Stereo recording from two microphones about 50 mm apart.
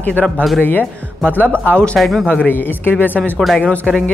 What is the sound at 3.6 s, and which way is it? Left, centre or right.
Speech, left.